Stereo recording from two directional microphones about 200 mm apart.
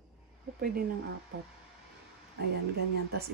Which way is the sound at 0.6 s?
50° right (ahead or behind).